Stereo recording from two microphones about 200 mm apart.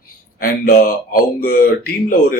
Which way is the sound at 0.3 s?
45° left (ahead or behind).